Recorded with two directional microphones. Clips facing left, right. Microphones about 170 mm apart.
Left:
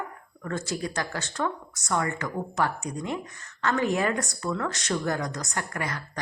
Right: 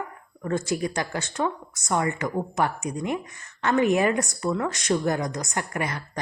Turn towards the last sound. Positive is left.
turn(degrees=-20)  # may be behind; listen again after turning